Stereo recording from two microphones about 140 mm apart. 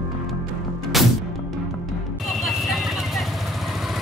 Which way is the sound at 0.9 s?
Centre (ahead or behind).